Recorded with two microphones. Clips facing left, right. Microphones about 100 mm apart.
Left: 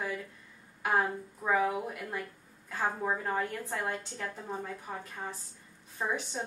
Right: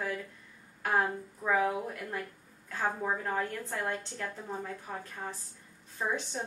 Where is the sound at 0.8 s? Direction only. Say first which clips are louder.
Even; 10° left (ahead or behind).